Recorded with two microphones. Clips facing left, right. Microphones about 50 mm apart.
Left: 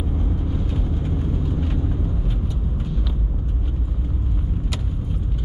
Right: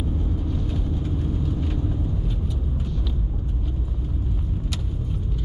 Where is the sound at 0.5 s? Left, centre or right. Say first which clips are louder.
Left 1 dB; centre.